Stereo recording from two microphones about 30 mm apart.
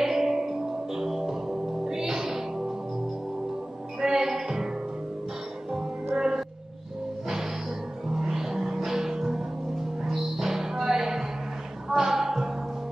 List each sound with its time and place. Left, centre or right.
0.0 s music: centre
4.0 s music: centre